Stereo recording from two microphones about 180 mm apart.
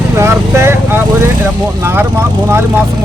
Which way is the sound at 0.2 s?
15° right (ahead or behind).